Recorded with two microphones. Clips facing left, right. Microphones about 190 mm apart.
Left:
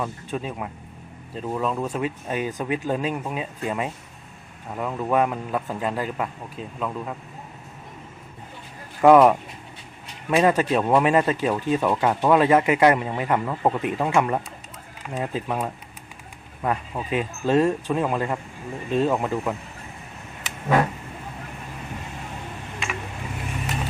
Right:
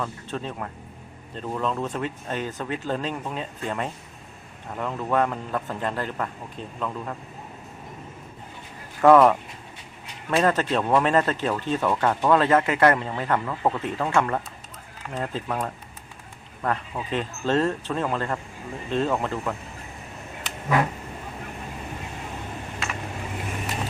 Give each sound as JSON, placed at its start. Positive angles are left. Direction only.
{"t": 0.0, "sound": "speech", "side_deg": 10}
{"t": 9.0, "sound": "speech", "side_deg": 10}